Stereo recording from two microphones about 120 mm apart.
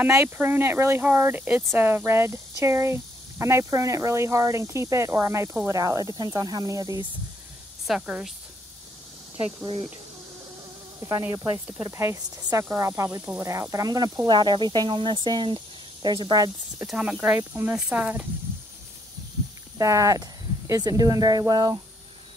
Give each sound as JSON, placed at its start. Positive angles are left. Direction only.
{"t": 0.0, "sound": "speech", "side_deg": -20}
{"t": 7.8, "sound": "speech", "side_deg": -5}
{"t": 11.0, "sound": "speech", "side_deg": -25}
{"t": 16.8, "sound": "speech", "side_deg": -5}
{"t": 19.8, "sound": "speech", "side_deg": -25}